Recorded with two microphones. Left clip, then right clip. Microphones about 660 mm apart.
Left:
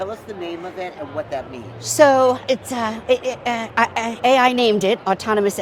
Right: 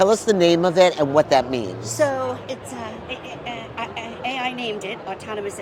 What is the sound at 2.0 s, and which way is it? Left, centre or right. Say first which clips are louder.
Speech: left 9 dB; left.